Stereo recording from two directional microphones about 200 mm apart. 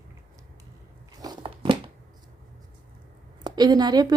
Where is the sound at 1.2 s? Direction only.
25° right (ahead or behind).